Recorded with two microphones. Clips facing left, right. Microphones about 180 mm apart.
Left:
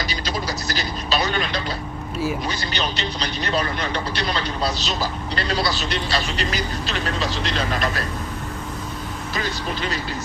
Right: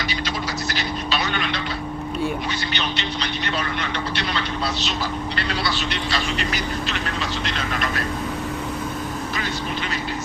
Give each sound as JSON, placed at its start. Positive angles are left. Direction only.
{"t": 0.1, "sound": "vehicle", "side_deg": 40}
{"t": 2.7, "sound": "speech", "side_deg": 40}